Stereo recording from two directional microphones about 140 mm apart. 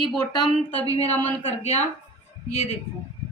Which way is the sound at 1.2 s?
50° left (ahead or behind).